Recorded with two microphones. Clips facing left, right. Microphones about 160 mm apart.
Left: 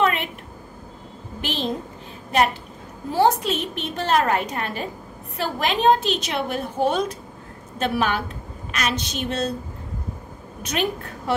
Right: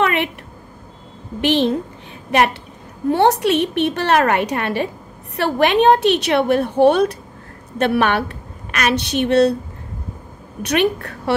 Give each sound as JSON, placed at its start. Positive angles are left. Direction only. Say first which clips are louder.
{"t": 0.0, "sound": "a sound", "louder": "right 3 dB", "side_deg": -70}
{"t": 1.4, "sound": "a woman's voice", "louder": "right 11 dB", "side_deg": -70}
{"t": 3.1, "sound": "a woman's voice", "louder": "right 5 dB", "side_deg": -70}
{"t": 10.6, "sound": "a woman's voice", "louder": "right 7 dB", "side_deg": -70}